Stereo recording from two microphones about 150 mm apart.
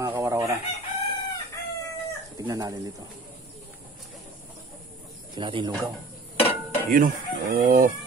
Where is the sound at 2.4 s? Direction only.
25° right (ahead or behind).